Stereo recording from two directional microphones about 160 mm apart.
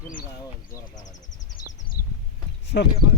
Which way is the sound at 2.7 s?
90° left.